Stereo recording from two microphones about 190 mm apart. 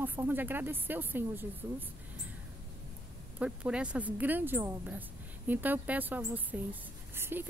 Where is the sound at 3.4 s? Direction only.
5° right (ahead or behind).